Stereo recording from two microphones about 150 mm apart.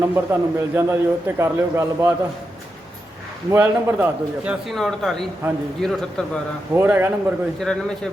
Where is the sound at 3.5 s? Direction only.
15° right (ahead or behind).